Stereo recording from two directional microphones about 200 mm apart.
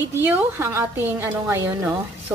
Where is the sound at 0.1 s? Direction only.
10° right (ahead or behind).